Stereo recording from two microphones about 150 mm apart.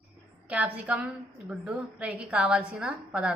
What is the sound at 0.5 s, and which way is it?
A woman's voice, 10° right (ahead or behind).